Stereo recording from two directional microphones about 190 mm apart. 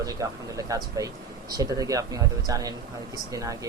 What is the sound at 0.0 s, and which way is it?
Speech, 20° right (ahead or behind).